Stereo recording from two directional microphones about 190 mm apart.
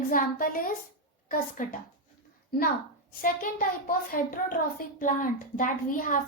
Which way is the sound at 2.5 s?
55° left (ahead or behind).